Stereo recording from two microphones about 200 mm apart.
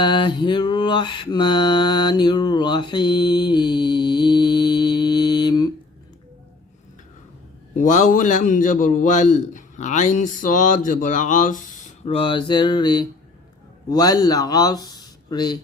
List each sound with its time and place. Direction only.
0.0 s mantra: 25° left (ahead or behind)
7.8 s a man's voice: 40° left (ahead or behind)
12.1 s speech: 25° left (ahead or behind)